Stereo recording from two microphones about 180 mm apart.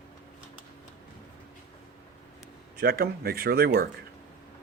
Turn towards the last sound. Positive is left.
turn(degrees=-60)  # may be behind; listen again after turning